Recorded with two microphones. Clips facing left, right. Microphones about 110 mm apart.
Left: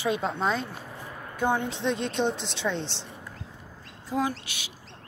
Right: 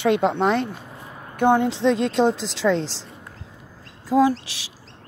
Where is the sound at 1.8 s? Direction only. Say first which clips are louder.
Right 8 dB; 90° right.